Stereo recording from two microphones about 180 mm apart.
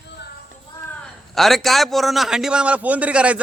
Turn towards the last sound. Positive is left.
turn(degrees=-5)  # may be behind; listen again after turning